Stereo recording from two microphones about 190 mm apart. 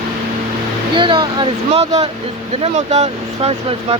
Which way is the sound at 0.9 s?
25° right (ahead or behind).